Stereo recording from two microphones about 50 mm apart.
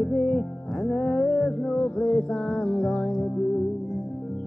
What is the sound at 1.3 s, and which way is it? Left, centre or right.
Music, centre.